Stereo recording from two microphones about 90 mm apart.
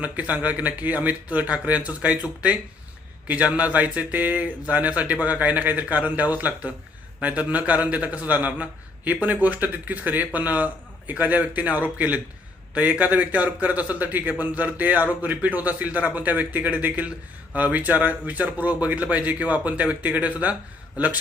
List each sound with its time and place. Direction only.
0.0 s a man's voice: 15° right (ahead or behind)